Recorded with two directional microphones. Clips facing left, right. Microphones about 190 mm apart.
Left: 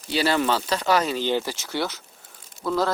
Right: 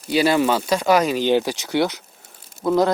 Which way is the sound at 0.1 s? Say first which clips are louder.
Right 5 dB; 10° right (ahead or behind).